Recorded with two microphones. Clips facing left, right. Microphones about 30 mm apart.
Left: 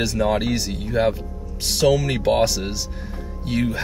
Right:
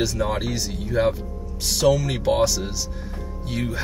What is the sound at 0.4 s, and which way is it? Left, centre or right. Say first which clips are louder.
Speech: left 3 dB; left.